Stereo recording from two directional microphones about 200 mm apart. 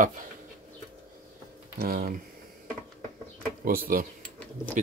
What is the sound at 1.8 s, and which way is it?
Speech, 45° right (ahead or behind).